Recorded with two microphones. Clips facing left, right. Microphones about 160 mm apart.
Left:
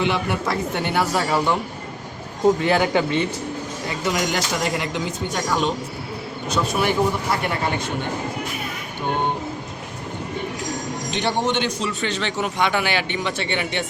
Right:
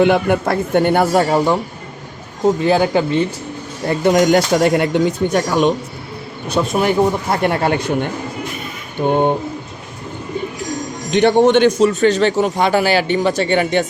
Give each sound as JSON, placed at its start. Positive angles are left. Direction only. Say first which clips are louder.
{"t": 0.0, "sound": "speech", "louder": "right 9 dB", "side_deg": -55}
{"t": 2.6, "sound": "speech", "louder": "right 5 dB", "side_deg": -25}
{"t": 3.8, "sound": "speech", "louder": "right 11 dB", "side_deg": -50}
{"t": 6.5, "sound": "speech", "louder": "right 5 dB", "side_deg": -45}
{"t": 9.0, "sound": "speech", "louder": "right 9 dB", "side_deg": -55}
{"t": 11.1, "sound": "a man's voice", "louder": "right 12 dB", "side_deg": -55}